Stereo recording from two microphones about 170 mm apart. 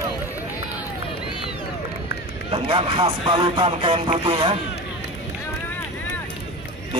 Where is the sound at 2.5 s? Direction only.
30° right (ahead or behind).